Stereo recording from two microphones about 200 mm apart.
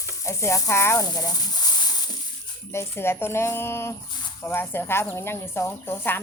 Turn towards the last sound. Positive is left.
turn(degrees=10)  # may be behind; listen again after turning